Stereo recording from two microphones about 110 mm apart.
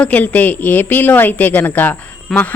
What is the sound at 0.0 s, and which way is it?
A woman's voice, 15° left (ahead or behind).